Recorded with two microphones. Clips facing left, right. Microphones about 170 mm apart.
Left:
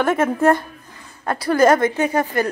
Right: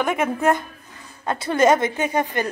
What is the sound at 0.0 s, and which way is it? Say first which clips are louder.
A woman's voice: left 4 dB; 15° right (ahead or behind).